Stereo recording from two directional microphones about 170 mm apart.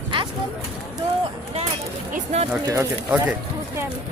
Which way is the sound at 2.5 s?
20° right (ahead or behind).